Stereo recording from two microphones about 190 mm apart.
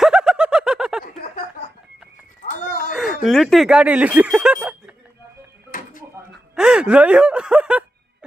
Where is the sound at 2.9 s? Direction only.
Centre (ahead or behind).